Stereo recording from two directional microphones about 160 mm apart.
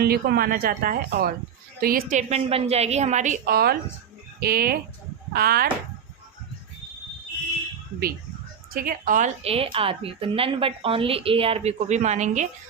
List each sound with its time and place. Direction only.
0.0 s a woman's voice: 75° right (ahead or behind)
8.7 s speech: 65° right (ahead or behind)
9.4 s a woman's voice: 35° right (ahead or behind)